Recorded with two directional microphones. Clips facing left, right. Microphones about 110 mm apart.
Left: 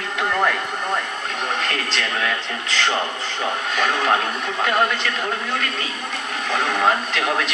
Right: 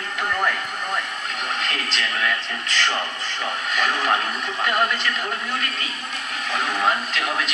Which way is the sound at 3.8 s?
30° left (ahead or behind).